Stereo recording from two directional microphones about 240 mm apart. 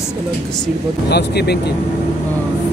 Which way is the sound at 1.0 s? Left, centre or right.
Left.